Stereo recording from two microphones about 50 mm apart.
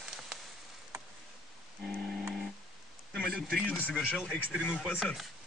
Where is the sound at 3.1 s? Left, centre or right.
Left.